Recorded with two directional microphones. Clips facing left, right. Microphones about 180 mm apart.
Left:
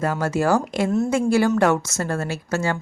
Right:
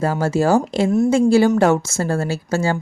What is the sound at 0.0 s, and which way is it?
Speech, 30° right (ahead or behind).